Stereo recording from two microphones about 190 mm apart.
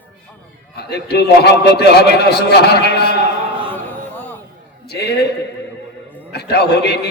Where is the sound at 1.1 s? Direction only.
60° left (ahead or behind).